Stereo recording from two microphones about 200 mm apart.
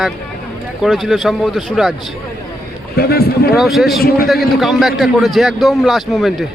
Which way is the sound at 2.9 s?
50° left (ahead or behind).